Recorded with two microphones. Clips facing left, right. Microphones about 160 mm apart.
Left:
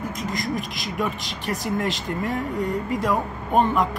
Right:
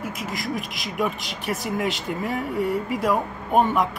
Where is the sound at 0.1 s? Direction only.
5° right (ahead or behind).